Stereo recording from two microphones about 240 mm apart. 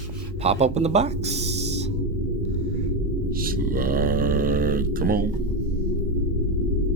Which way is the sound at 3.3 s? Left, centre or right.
Right.